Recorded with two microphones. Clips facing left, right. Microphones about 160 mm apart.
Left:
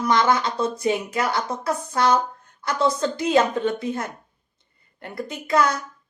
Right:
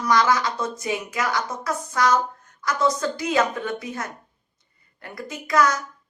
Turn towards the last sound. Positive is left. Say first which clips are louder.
# even
turn(degrees=30)  # may be behind; listen again after turning